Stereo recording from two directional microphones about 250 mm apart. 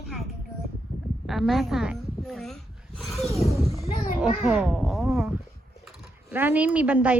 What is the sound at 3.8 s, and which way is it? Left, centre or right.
Children playing, left.